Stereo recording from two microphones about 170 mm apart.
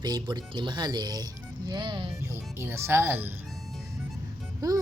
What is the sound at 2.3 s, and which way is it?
Speech, 15° right (ahead or behind).